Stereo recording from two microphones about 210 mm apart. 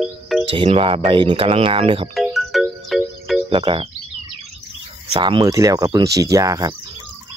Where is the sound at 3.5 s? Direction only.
25° right (ahead or behind).